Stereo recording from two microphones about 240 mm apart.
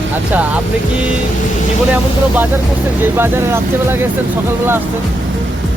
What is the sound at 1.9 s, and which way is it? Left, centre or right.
Speech, centre.